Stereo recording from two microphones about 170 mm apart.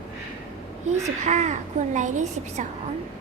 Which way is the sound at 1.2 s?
45° right (ahead or behind).